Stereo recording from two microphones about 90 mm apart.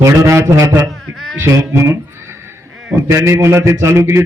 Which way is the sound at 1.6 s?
35° right (ahead or behind).